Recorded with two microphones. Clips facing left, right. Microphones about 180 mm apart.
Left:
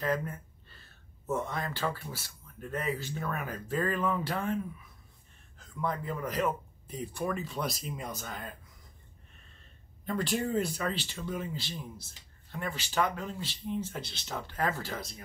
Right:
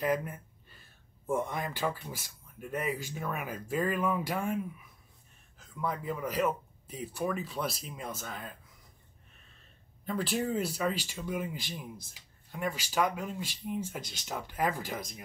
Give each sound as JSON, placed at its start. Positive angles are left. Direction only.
{"t": 0.0, "sound": "speech", "side_deg": -10}
{"t": 10.0, "sound": "speech", "side_deg": -5}